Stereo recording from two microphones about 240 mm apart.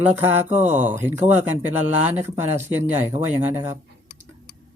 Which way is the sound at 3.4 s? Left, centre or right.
Centre.